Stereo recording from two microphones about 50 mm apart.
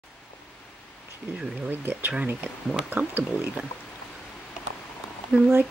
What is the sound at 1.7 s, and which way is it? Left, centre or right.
Speech, right.